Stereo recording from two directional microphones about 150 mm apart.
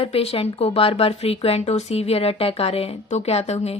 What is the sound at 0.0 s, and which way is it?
Speech, 40° left (ahead or behind).